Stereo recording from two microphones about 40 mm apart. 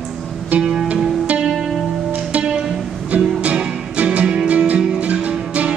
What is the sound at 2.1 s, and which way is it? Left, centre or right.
Music, right.